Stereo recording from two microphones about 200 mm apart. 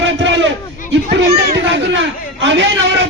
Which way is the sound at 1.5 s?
65° right (ahead or behind).